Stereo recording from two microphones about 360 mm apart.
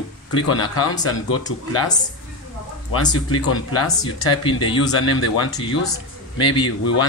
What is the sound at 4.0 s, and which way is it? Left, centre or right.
Speech, centre.